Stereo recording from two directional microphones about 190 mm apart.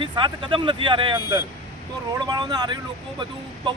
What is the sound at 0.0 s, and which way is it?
Speech, 25° right (ahead or behind).